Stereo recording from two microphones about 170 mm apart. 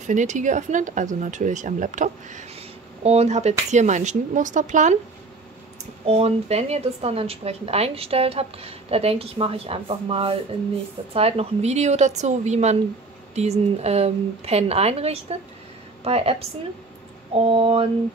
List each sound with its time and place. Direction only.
0.0 s a woman's voice: 45° right (ahead or behind)
6.0 s a woman's voice: 40° right (ahead or behind)